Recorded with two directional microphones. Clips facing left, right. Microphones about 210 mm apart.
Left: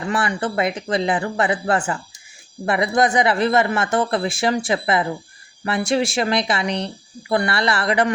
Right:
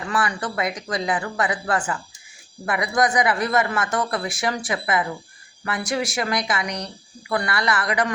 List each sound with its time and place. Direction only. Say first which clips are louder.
0.1 s speech: left 3 dB; 25° left (ahead or behind)